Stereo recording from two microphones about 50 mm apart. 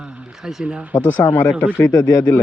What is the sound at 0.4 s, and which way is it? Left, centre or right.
Speech, centre.